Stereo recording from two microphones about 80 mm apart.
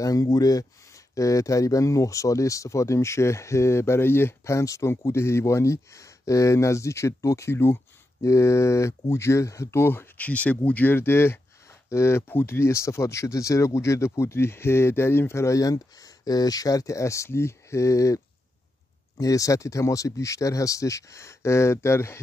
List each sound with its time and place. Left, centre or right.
0.0 s speech: left